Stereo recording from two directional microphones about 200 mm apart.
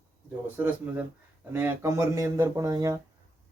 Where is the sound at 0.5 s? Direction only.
10° right (ahead or behind).